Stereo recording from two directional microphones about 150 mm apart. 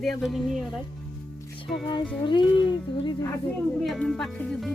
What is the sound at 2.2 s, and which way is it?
Speech, 30° left (ahead or behind).